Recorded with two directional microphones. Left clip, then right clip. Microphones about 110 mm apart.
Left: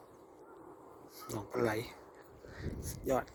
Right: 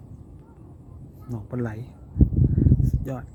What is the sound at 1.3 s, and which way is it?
Speech, 30° left (ahead or behind).